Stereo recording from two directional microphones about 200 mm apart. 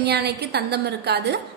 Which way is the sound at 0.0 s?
55° right (ahead or behind).